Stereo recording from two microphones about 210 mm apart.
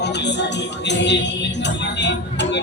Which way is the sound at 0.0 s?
55° left (ahead or behind).